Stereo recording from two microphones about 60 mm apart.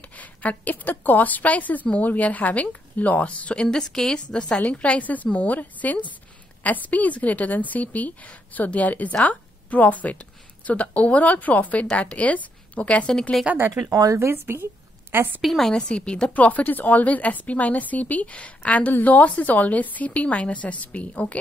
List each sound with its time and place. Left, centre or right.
0.1 s a woman's voice: left
3.6 s a woman's voice: centre
13.5 s speech: right
13.8 s speech: right
14.2 s a woman's voice: right
15.4 s a woman's voice: centre
15.9 s a woman's voice: centre
16.3 s a woman's voice: left